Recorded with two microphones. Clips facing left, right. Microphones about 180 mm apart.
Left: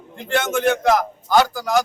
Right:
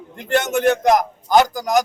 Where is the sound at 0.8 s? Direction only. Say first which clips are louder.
Right 2 dB; 15° right (ahead or behind).